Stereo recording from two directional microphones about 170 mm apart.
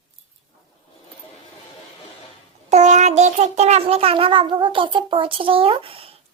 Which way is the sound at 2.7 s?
45° right (ahead or behind).